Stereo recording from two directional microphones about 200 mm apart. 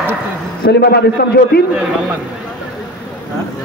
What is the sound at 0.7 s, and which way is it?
Speech, 55° left (ahead or behind).